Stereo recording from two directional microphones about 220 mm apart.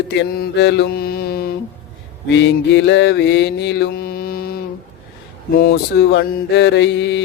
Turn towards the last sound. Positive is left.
turn(degrees=55)  # may be behind; listen again after turning